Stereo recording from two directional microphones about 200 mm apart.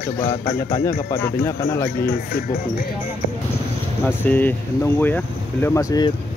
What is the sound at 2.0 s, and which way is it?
Speech, 45° left (ahead or behind).